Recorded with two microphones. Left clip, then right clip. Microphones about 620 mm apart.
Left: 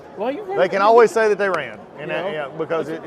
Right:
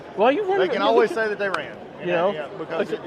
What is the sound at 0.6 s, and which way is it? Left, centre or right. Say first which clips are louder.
Speech: left 8 dB; left.